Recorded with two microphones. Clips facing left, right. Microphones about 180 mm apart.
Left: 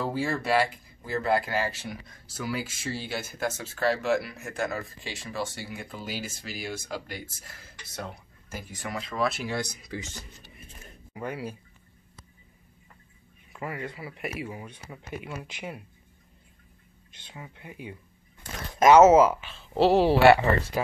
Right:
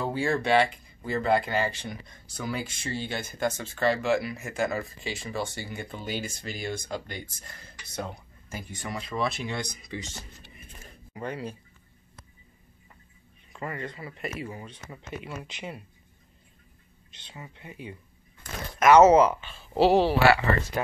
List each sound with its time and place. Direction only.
0.0 s speech: centre (ahead or behind)
13.5 s speech: 5° left (ahead or behind)
17.6 s speech: 10° left (ahead or behind)
18.4 s a sound: 30° left (ahead or behind)
18.9 s speech: 5° left (ahead or behind)